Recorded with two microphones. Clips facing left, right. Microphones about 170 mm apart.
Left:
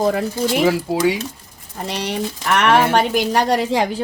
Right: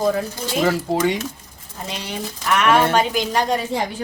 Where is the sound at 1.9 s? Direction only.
70° left (ahead or behind).